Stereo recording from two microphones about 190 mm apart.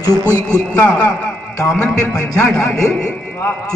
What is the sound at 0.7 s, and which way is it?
Speech, 10° left (ahead or behind).